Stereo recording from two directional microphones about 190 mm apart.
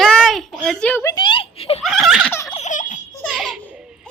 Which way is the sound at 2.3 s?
10° left (ahead or behind).